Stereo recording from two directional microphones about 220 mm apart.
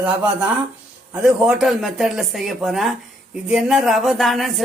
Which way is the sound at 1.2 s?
Centre (ahead or behind).